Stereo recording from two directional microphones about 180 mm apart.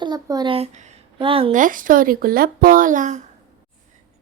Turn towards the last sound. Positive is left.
turn(degrees=-45)  # may be behind; listen again after turning